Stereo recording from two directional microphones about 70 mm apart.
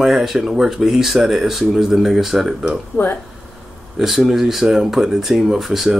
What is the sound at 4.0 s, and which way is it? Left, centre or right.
Speech, centre.